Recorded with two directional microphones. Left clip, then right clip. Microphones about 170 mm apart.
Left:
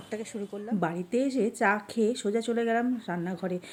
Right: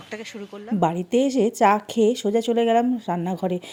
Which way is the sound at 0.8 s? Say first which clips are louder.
Right 9 dB; 35° right (ahead or behind).